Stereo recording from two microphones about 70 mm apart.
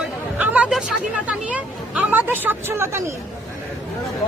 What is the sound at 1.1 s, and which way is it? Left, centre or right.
Speech, centre.